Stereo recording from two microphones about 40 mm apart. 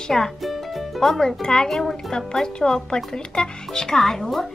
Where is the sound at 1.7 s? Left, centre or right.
Centre.